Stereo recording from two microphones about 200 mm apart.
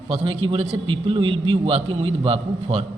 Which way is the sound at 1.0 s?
25° right (ahead or behind).